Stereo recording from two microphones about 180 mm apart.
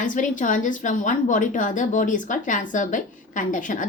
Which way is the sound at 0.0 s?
45° left (ahead or behind).